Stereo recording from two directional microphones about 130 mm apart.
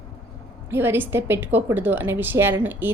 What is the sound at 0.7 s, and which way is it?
A woman's voice, 15° right (ahead or behind).